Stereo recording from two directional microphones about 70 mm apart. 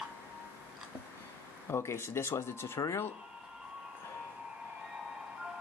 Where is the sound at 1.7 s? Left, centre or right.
Left.